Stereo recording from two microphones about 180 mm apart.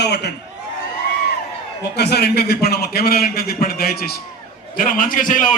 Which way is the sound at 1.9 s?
65° left (ahead or behind).